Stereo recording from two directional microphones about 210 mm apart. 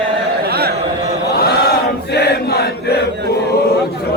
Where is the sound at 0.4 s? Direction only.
50° right (ahead or behind).